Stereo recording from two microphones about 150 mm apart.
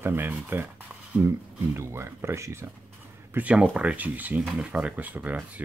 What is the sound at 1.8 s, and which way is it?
Speech, 15° right (ahead or behind).